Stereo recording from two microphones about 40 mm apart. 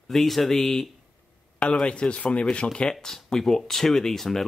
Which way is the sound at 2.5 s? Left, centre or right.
Left.